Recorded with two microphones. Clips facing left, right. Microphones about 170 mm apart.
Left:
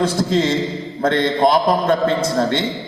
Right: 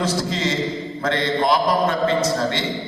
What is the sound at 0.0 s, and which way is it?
A man's voice, 55° left (ahead or behind).